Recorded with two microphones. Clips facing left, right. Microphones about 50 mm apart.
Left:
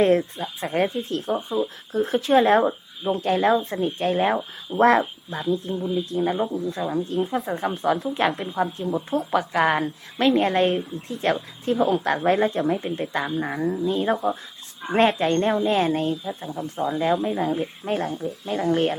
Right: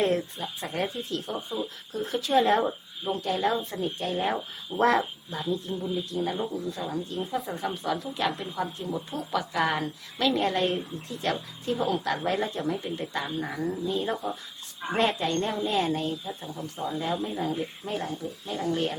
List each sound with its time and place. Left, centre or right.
0.0 s speech: left
2.6 s speech: left
3.2 s speech: left